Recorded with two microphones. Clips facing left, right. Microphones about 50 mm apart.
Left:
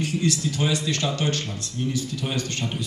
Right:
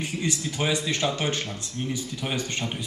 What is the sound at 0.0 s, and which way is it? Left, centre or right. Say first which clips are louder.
Speech: left 4 dB; centre.